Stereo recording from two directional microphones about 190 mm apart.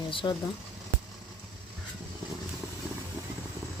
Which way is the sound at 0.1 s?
25° left (ahead or behind).